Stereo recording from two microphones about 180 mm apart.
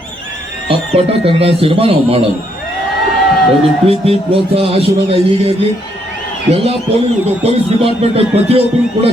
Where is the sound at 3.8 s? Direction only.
35° right (ahead or behind).